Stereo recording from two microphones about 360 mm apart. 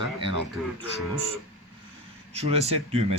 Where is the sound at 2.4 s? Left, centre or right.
Centre.